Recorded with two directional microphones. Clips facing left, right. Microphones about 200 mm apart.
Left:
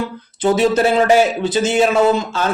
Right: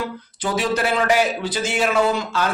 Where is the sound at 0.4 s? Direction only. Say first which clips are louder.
Left 8 dB; 25° left (ahead or behind).